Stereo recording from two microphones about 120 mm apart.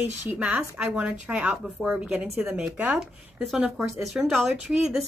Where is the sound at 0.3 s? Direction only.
15° right (ahead or behind).